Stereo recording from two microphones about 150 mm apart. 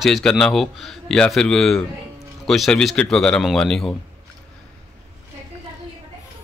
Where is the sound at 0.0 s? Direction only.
Centre (ahead or behind).